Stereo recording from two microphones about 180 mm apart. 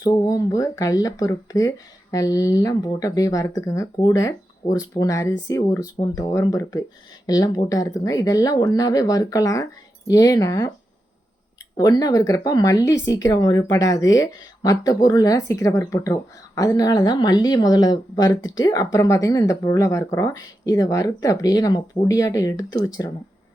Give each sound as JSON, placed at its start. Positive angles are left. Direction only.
{"t": 0.0, "sound": "speech", "side_deg": 20}
{"t": 11.8, "sound": "speech", "side_deg": 20}